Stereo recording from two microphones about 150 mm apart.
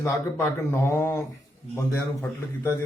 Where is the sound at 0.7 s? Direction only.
15° left (ahead or behind).